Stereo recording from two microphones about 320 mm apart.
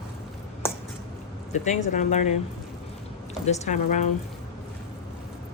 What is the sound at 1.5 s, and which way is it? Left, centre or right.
Speech, left.